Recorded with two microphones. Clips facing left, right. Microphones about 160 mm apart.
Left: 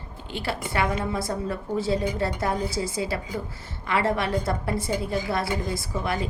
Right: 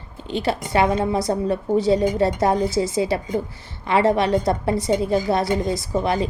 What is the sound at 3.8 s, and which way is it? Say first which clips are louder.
A woman's voice: right 7 dB; 20° right (ahead or behind).